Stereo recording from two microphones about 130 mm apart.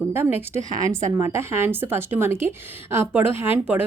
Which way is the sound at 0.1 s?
20° right (ahead or behind).